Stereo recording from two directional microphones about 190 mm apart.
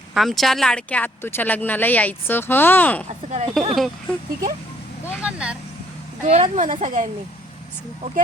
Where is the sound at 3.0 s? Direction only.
35° right (ahead or behind).